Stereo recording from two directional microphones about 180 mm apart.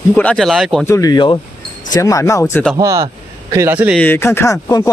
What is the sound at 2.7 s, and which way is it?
Speech, 15° right (ahead or behind).